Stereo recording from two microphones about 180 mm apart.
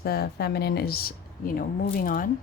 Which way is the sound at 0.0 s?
60° left (ahead or behind).